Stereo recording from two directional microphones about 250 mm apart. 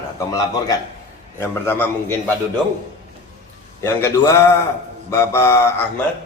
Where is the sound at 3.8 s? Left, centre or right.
Centre.